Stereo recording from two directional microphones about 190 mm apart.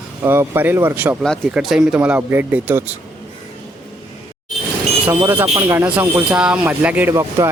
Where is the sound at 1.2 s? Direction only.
Centre (ahead or behind).